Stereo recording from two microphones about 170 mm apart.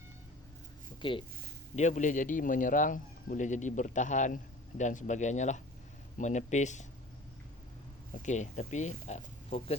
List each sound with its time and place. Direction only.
1.0 s speech: 30° left (ahead or behind)
1.7 s a man's voice: 45° left (ahead or behind)
8.1 s a man's voice: 45° left (ahead or behind)